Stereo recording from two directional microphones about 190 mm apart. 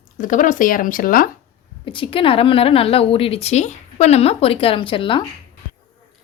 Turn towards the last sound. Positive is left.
turn(degrees=25)  # may be behind; listen again after turning